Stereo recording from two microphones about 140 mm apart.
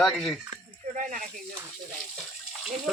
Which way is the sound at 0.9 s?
70° right (ahead or behind).